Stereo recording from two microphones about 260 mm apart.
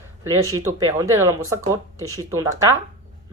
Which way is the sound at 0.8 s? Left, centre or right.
Centre.